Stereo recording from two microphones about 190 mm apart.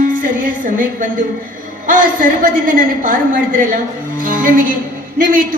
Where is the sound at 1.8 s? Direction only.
45° right (ahead or behind).